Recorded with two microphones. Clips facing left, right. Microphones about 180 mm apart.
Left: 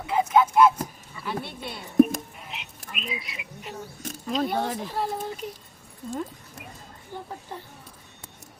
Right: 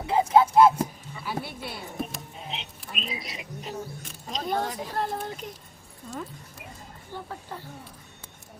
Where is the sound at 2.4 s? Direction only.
30° right (ahead or behind).